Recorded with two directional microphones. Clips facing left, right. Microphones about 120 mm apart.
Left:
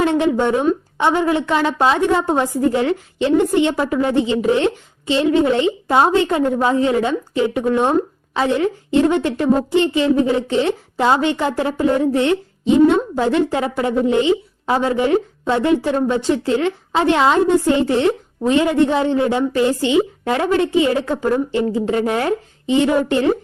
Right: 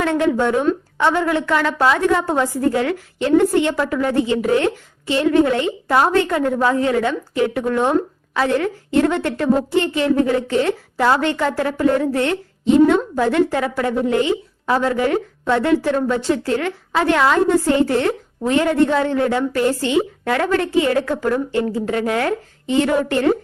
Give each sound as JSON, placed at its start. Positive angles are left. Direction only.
{"t": 0.0, "sound": "a woman's voice", "side_deg": 20}